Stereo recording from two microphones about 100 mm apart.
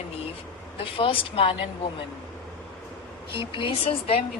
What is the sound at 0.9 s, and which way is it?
Speech, 65° left (ahead or behind).